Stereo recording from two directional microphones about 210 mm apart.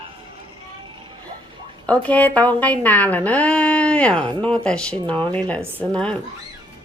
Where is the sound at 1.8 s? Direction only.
5° left (ahead or behind).